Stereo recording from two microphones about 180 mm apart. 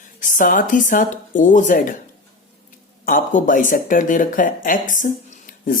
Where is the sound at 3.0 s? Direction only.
50° left (ahead or behind).